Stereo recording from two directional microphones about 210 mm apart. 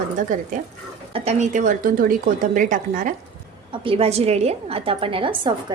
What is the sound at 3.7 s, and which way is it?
A woman's voice, 25° right (ahead or behind).